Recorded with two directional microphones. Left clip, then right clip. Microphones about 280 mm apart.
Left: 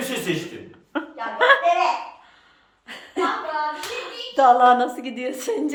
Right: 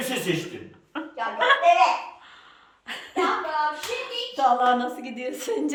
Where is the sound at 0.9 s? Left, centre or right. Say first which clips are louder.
Left 1 dB; centre.